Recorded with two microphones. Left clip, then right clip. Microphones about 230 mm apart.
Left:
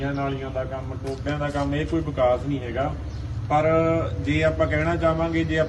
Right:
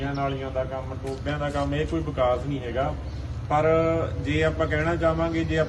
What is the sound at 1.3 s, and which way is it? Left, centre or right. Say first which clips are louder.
A man's voice: left 1 dB; centre.